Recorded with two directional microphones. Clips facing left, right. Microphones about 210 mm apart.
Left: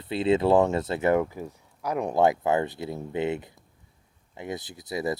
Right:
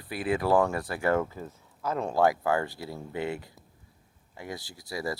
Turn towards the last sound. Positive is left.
turn(degrees=20)  # may be behind; listen again after turning